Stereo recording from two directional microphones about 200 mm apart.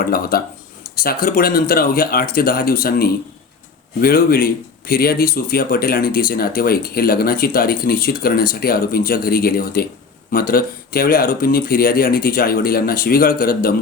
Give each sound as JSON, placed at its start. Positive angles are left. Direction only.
{"t": 0.0, "sound": "speech", "side_deg": 45}